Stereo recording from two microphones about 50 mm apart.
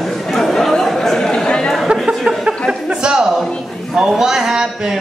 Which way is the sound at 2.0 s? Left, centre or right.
Centre.